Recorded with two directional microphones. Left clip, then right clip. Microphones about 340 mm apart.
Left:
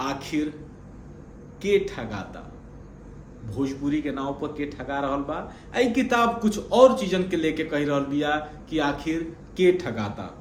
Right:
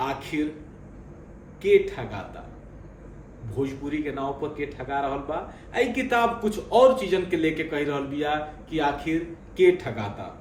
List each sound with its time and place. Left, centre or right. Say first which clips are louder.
0.0 s a sound: even; centre
1.6 s a man's voice: right 3 dB; centre
3.5 s a man's voice: left 2 dB; centre